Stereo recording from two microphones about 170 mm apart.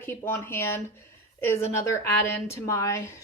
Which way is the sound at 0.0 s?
15° left (ahead or behind).